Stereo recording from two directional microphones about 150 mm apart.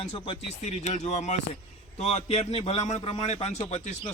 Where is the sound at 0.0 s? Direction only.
40° left (ahead or behind).